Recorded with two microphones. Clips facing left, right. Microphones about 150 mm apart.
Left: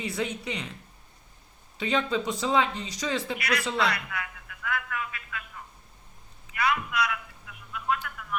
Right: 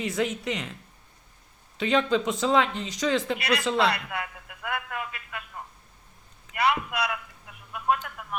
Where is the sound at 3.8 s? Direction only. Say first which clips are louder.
Right 3 dB; 30° right (ahead or behind).